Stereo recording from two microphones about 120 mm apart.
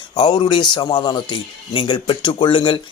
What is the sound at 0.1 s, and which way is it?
Speech, 40° left (ahead or behind).